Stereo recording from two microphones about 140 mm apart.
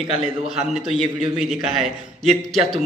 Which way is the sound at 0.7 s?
Centre (ahead or behind).